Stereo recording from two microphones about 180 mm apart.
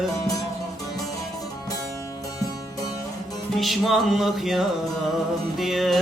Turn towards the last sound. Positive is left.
turn(degrees=0)  # may be behind; listen again after turning